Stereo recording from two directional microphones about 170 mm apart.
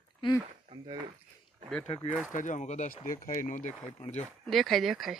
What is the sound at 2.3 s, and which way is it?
Speech, 50° left (ahead or behind).